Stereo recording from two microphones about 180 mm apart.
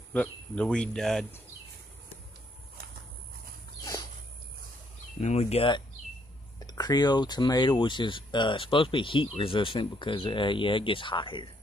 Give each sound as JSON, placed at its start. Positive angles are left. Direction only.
{"t": 0.1, "sound": "speech", "side_deg": 5}
{"t": 5.2, "sound": "speech", "side_deg": 35}